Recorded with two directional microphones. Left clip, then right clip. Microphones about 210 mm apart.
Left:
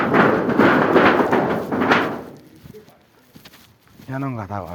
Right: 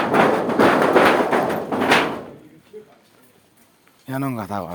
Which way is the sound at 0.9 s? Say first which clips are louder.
Even; 35° left (ahead or behind).